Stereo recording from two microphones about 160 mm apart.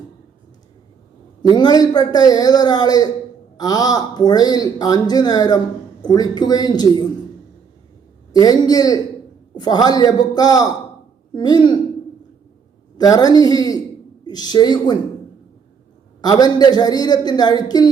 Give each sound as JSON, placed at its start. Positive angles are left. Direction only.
{"t": 1.4, "sound": "speech", "side_deg": 25}
{"t": 8.3, "sound": "speech", "side_deg": 25}
{"t": 13.0, "sound": "speech", "side_deg": 25}
{"t": 16.2, "sound": "speech", "side_deg": 25}